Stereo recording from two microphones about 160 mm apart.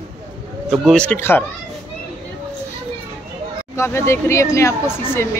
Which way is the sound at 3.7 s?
15° left (ahead or behind).